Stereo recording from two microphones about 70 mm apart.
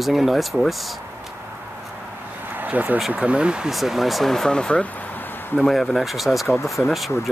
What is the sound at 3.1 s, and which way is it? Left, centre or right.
Speech, centre.